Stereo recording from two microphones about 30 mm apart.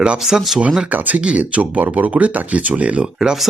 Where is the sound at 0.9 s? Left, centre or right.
Right.